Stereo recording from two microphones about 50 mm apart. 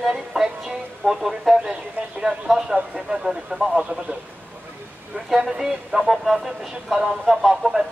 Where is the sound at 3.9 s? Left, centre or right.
Centre.